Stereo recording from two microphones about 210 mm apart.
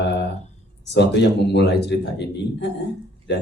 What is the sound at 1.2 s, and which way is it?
A man's voice, 55° left (ahead or behind).